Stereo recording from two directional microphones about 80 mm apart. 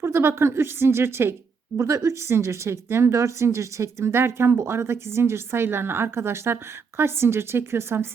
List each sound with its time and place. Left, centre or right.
0.0 s a woman's voice: right